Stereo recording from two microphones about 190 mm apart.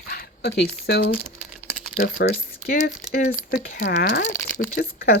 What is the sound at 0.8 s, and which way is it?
Speech, 60° left (ahead or behind).